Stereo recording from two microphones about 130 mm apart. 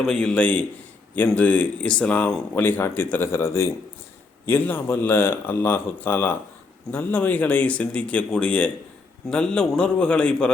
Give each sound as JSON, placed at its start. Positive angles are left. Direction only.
{"t": 0.0, "sound": "speech", "side_deg": 5}